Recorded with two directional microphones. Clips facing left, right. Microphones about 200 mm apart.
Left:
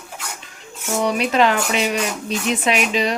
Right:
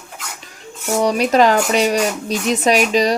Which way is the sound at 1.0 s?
40° right (ahead or behind).